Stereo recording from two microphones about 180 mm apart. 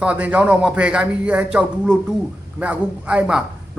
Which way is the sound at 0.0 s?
5° right (ahead or behind).